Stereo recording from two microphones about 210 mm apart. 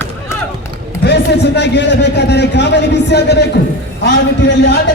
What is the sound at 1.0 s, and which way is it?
A man's voice, 55° left (ahead or behind).